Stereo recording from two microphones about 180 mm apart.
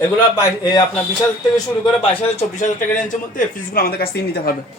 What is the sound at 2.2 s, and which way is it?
Speech, 40° left (ahead or behind).